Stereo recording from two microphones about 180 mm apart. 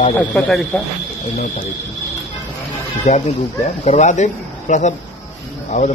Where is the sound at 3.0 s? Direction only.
40° left (ahead or behind).